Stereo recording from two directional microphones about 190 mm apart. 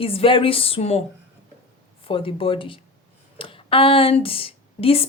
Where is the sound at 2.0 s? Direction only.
30° left (ahead or behind).